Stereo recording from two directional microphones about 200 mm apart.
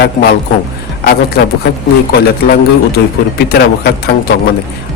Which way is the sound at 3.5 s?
55° left (ahead or behind).